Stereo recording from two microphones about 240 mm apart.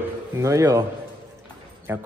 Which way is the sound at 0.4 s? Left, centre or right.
Centre.